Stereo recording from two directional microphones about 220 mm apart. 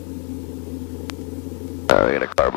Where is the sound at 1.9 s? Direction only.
10° left (ahead or behind).